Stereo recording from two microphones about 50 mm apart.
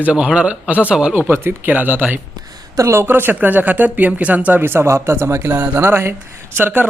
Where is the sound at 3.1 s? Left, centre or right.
Right.